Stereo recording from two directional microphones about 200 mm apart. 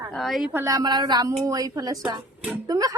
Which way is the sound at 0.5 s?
15° right (ahead or behind).